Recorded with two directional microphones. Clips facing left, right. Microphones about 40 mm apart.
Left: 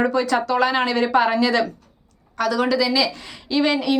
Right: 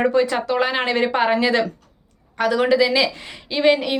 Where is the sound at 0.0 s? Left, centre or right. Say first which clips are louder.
Right 1 dB; right.